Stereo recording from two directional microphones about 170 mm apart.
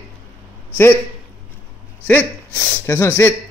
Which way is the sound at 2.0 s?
10° left (ahead or behind).